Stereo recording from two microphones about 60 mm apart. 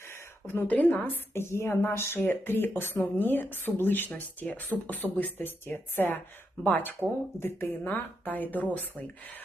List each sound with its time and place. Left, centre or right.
0.4 s speech: left
1.3 s a woman's voice: left
7.3 s speech: left